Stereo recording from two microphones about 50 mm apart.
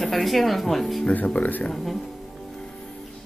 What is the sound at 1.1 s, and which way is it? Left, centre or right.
Speech, left.